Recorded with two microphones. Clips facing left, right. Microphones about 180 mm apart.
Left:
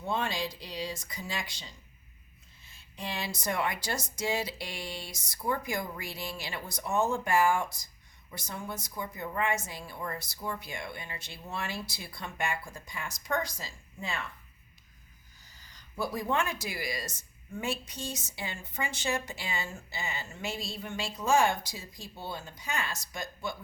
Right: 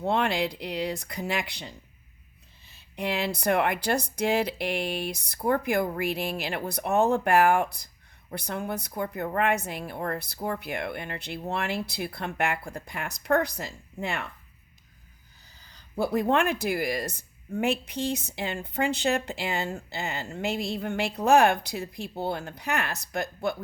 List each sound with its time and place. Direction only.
0.0 s speech: 65° right (ahead or behind)
15.7 s speech: 60° right (ahead or behind)